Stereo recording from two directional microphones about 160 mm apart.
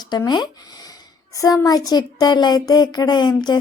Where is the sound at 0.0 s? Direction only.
25° left (ahead or behind).